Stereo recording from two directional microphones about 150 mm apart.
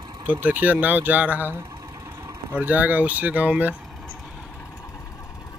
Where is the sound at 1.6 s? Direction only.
25° right (ahead or behind).